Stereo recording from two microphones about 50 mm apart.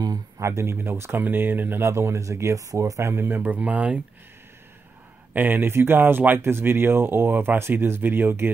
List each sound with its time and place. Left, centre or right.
0.4 s speech: right
1.1 s speech: right
1.8 s speech: right
3.4 s speech: right
5.3 s speech: right